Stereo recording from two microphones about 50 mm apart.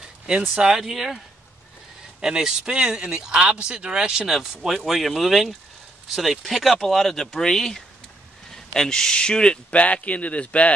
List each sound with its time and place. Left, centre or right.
0.6 s speech: centre
2.2 s speech: centre
4.3 s speech: centre; by 10.7 s left